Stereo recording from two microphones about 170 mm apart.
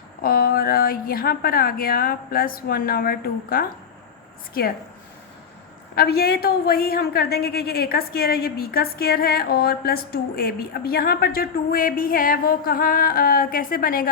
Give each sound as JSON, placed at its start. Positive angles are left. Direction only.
{"t": 0.2, "sound": "a woman's voice", "side_deg": 60}
{"t": 5.9, "sound": "a woman's voice", "side_deg": 65}